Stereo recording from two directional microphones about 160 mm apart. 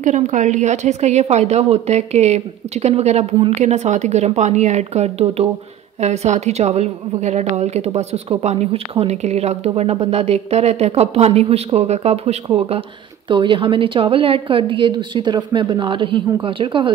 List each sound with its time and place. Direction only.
0.0 s a woman's voice: 50° right (ahead or behind); by 16.9 s 30° right (ahead or behind)